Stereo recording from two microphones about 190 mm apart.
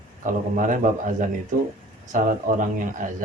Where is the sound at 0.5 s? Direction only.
45° right (ahead or behind).